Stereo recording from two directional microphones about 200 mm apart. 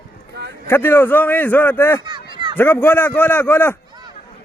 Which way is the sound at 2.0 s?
25° right (ahead or behind).